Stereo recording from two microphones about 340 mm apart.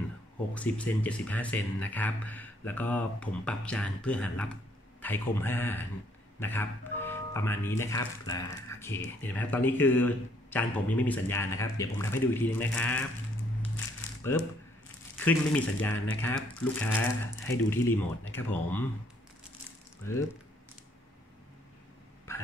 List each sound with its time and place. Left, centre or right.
0.6 s speech: centre
14.3 s speech: centre